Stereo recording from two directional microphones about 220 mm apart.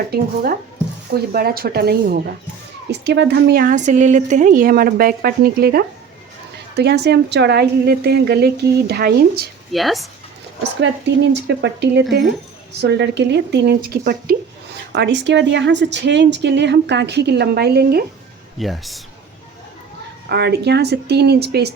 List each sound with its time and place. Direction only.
1.1 s speech: 45° right (ahead or behind)
9.7 s speech: centre (ahead or behind)
10.8 s speech: 55° right (ahead or behind)
18.6 s speech: centre (ahead or behind)
20.2 s speech: 50° right (ahead or behind)